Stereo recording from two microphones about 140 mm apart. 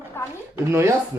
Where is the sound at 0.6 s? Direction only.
20° right (ahead or behind).